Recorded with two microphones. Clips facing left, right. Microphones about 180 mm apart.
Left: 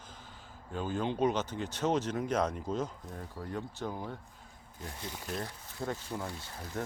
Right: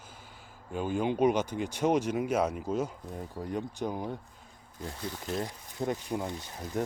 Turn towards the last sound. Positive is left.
turn(degrees=-15)  # may be behind; listen again after turning